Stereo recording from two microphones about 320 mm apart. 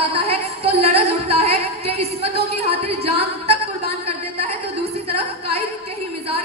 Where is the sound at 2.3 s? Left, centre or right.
Centre.